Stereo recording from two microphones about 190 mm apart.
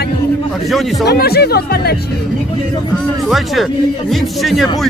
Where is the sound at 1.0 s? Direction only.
55° left (ahead or behind).